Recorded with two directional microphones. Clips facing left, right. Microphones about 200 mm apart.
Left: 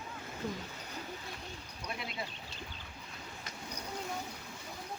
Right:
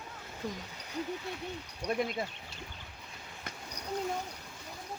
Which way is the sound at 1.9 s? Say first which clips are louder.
Right 11 dB; 45° right (ahead or behind).